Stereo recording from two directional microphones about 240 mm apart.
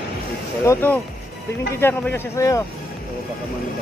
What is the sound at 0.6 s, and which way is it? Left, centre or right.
A man's voice, centre.